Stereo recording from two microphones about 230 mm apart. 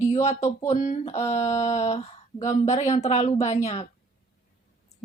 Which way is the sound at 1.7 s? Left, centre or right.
Left.